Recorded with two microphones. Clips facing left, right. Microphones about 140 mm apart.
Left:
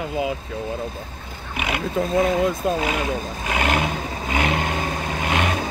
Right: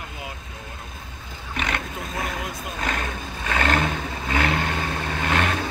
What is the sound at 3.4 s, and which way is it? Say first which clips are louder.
Vehicle: even; 15° left (ahead or behind).